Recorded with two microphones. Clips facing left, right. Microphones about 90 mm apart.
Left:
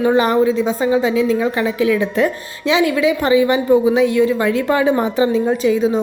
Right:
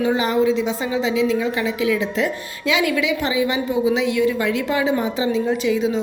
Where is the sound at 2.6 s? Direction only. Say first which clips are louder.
Left 5 dB; 30° left (ahead or behind).